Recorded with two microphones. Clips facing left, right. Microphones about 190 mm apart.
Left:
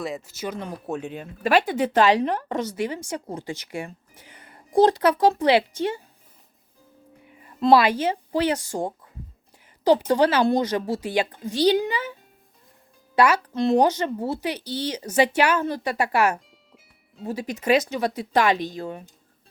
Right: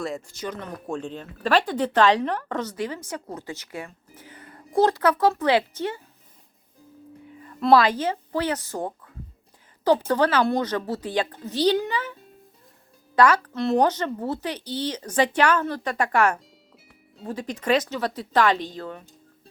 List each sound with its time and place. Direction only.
0.0 s speech: 5° left (ahead or behind)
3.8 s speech: 25° left (ahead or behind)
7.3 s speech: 20° left (ahead or behind)
13.1 s speech: 10° left (ahead or behind)